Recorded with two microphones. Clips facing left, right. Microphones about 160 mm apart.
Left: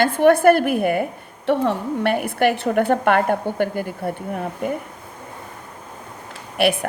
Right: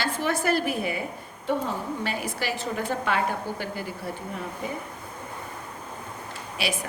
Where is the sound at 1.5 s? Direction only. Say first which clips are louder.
Left 8 dB; 65° left (ahead or behind).